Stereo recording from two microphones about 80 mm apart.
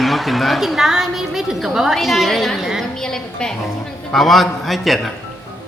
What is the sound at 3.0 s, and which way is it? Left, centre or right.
A woman's voice, centre.